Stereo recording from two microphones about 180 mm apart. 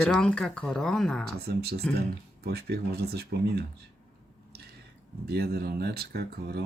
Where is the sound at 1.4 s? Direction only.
60° right (ahead or behind).